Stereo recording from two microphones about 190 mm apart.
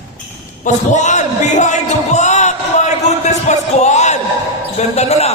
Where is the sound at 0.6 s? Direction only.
40° left (ahead or behind).